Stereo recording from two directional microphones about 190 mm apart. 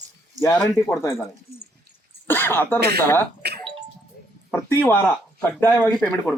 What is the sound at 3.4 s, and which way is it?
Music, 60° right (ahead or behind).